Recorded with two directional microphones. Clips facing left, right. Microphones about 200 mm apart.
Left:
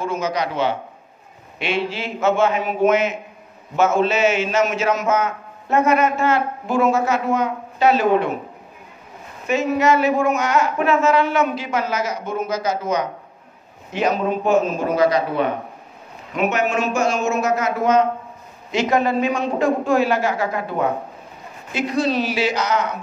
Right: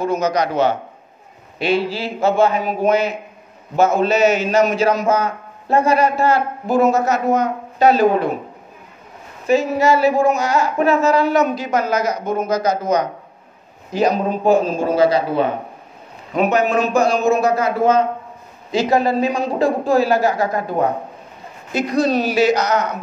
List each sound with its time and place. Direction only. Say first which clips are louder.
0.0 s a man's voice: right 4 dB; 40° right (ahead or behind)
9.5 s a man's voice: right 2 dB; 35° right (ahead or behind)